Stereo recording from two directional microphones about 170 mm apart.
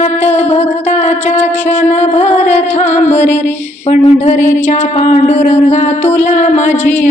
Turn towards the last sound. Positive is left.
turn(degrees=45)  # may be behind; listen again after turning